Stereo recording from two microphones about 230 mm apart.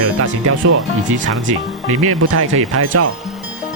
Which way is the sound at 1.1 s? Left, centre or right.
Right.